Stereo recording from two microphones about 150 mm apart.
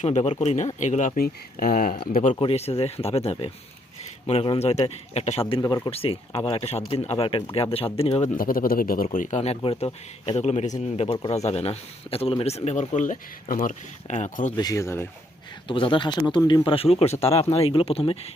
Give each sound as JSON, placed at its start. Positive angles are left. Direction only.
{"t": 0.0, "sound": "speech", "side_deg": 50}
{"t": 2.3, "sound": "speech", "side_deg": 40}
{"t": 5.5, "sound": "speech", "side_deg": 25}
{"t": 5.9, "sound": "speech", "side_deg": 40}
{"t": 8.4, "sound": "speech", "side_deg": 70}
{"t": 9.1, "sound": "speech", "side_deg": 55}
{"t": 14.5, "sound": "speech", "side_deg": 25}
{"t": 15.6, "sound": "speech", "side_deg": 35}